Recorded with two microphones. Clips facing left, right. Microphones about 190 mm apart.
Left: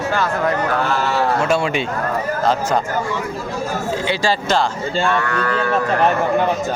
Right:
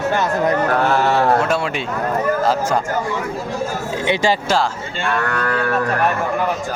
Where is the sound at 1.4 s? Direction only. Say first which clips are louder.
Left 1 dB; centre (ahead or behind).